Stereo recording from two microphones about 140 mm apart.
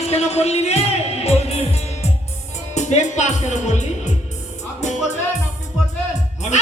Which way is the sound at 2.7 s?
55° left (ahead or behind).